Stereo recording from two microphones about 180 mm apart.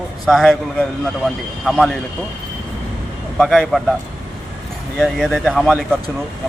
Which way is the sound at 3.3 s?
Centre (ahead or behind).